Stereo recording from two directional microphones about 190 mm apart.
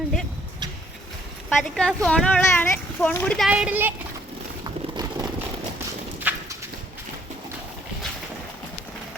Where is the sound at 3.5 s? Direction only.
5° right (ahead or behind).